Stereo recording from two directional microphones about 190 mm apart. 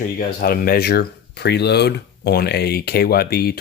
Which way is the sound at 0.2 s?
50° left (ahead or behind).